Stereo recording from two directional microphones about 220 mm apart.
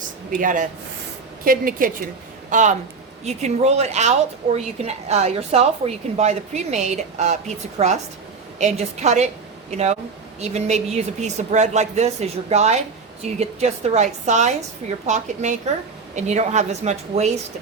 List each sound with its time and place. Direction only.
0.3 s a woman's voice: 35° right (ahead or behind)